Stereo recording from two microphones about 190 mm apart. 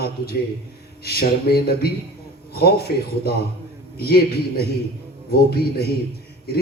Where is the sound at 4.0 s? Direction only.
55° left (ahead or behind).